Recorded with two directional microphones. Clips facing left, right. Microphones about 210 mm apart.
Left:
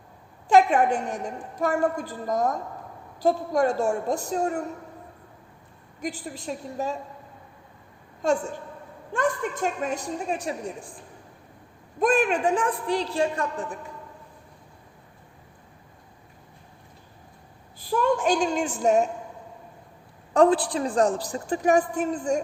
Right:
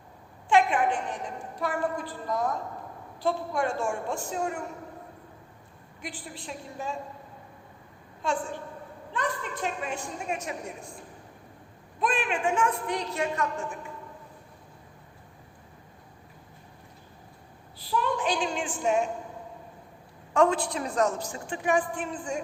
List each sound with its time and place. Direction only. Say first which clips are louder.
0.4 s a woman's voice: left 4 dB; 40° left (ahead or behind)
6.0 s a woman's voice: left 8 dB; 40° left (ahead or behind)
8.2 s a woman's voice: left 6 dB; 40° left (ahead or behind)
11.9 s a woman's voice: left 7 dB; 45° left (ahead or behind)
17.7 s a woman's voice: left 5 dB; 50° left (ahead or behind)
20.3 s a woman's voice: left 4 dB; 35° left (ahead or behind)